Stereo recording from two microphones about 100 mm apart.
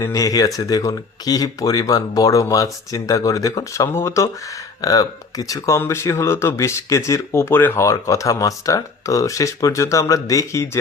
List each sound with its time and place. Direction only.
0.0 s speech: 35° left (ahead or behind)